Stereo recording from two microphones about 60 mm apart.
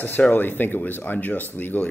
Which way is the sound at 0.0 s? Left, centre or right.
Left.